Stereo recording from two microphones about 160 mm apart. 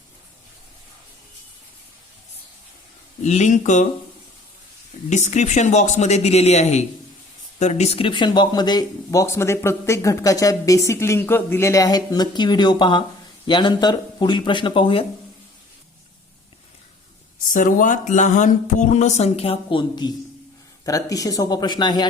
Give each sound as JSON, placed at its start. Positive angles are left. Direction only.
{"t": 3.2, "sound": "speech", "side_deg": 45}
{"t": 5.0, "sound": "speech", "side_deg": 50}
{"t": 17.5, "sound": "speech", "side_deg": 55}